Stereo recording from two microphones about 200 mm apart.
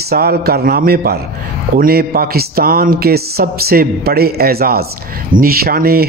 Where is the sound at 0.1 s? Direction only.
50° right (ahead or behind).